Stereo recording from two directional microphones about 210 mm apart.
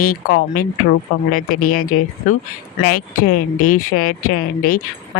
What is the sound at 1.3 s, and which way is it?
Speech, 40° left (ahead or behind).